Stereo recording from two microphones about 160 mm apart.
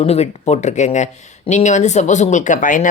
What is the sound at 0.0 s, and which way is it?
Speech, 40° left (ahead or behind).